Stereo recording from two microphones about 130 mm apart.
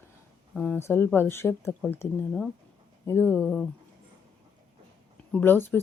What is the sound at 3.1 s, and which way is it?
Speech, 15° left (ahead or behind).